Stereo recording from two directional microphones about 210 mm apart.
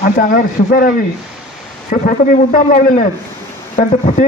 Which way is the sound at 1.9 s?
40° left (ahead or behind).